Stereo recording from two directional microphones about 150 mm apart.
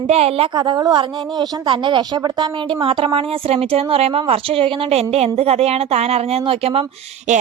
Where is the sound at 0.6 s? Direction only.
30° right (ahead or behind); by 7.4 s 45° right (ahead or behind).